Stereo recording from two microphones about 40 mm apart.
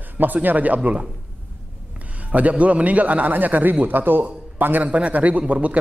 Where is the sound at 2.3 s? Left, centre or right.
Right.